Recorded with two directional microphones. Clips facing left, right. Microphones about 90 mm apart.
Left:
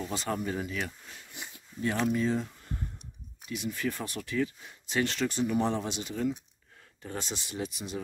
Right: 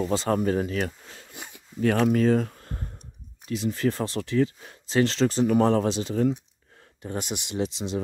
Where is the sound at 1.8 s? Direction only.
75° right (ahead or behind); by 2.8 s 55° right (ahead or behind).